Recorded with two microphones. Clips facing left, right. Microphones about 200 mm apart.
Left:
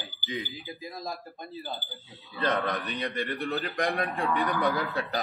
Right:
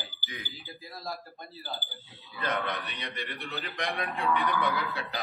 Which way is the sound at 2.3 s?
35° left (ahead or behind).